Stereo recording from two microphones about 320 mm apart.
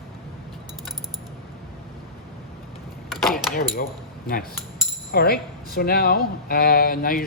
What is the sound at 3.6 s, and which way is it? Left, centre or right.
Speech, left.